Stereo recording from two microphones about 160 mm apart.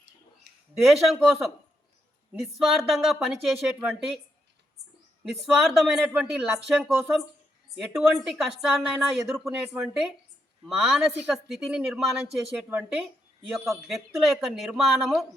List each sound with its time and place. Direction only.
0.5 s a sound: 90° right
0.9 s a woman's voice: centre (ahead or behind)
5.2 s a woman's voice: centre (ahead or behind)